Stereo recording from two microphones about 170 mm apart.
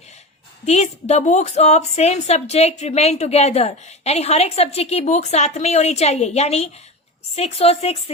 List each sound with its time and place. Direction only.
0.6 s a woman's voice: 40° left (ahead or behind)